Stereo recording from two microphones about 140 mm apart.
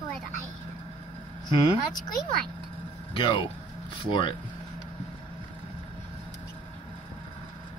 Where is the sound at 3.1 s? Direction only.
35° left (ahead or behind).